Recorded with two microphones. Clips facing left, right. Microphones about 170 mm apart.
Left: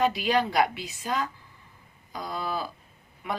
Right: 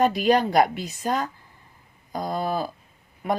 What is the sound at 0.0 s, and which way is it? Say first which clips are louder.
Speech: right 5 dB; 45° right (ahead or behind).